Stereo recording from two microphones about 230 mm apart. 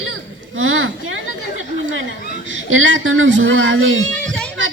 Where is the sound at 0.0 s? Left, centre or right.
Right.